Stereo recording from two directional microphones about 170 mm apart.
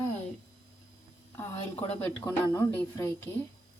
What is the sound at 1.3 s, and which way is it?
A woman's voice, 15° left (ahead or behind).